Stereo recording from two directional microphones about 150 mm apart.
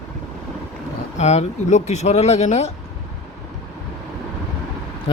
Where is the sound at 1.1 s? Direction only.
50° left (ahead or behind).